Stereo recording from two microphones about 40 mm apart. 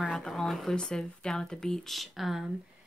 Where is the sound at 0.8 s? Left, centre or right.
Centre.